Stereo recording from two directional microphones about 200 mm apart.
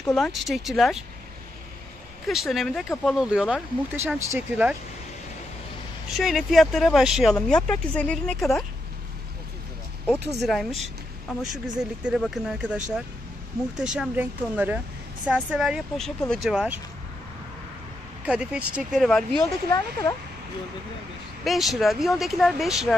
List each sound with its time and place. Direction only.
0.0 s speech: 5° left (ahead or behind)
2.2 s speech: centre (ahead or behind)
6.1 s speech: centre (ahead or behind)
10.4 s speech: centre (ahead or behind)
18.2 s speech: 5° right (ahead or behind)
19.7 s speech: 15° left (ahead or behind)
21.5 s speech: centre (ahead or behind)